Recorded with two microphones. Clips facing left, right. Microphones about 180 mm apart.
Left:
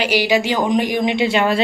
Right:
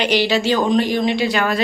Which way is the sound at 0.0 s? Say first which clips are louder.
Even; 10° left (ahead or behind).